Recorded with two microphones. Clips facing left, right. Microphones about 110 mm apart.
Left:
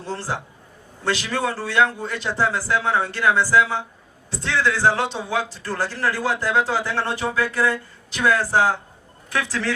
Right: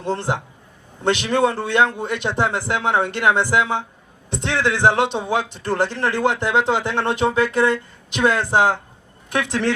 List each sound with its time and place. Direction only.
0.0 s a man's voice: 20° right (ahead or behind)